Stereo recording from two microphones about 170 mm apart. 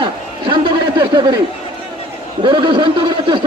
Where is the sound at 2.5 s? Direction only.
30° right (ahead or behind).